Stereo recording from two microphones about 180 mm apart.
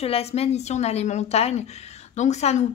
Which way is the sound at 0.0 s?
35° left (ahead or behind).